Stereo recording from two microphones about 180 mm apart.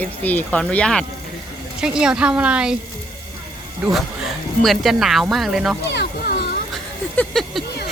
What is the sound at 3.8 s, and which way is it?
Speech, 5° right (ahead or behind).